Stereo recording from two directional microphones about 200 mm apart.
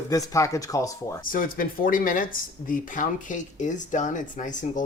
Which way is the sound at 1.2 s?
45° left (ahead or behind).